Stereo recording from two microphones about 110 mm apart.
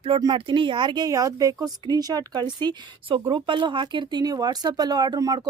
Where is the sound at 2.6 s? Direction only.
50° right (ahead or behind).